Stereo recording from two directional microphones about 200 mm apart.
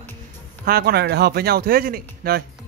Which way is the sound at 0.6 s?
50° right (ahead or behind).